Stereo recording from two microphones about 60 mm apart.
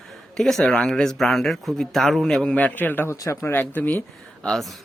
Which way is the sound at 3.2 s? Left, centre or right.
Left.